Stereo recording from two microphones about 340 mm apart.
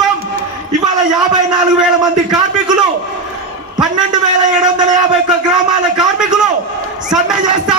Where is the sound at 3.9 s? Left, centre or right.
Centre.